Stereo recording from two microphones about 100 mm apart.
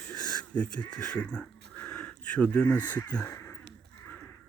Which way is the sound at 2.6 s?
15° left (ahead or behind).